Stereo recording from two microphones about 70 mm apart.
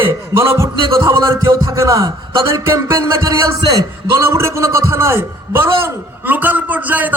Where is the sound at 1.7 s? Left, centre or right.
Right.